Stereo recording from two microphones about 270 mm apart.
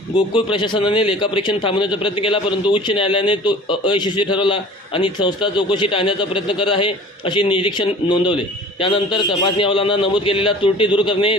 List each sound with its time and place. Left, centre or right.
0.3 s a man's voice: centre